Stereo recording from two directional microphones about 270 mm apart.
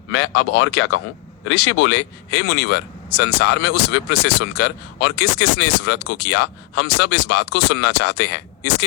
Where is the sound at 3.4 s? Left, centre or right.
Left.